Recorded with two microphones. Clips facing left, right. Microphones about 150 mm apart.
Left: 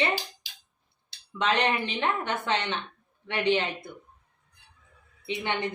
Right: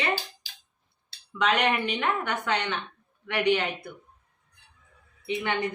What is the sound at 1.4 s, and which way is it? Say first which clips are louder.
Speech: right 1 dB; 30° left (ahead or behind).